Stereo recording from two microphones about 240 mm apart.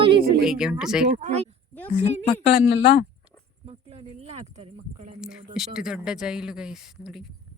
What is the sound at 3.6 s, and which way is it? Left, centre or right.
Speech, right.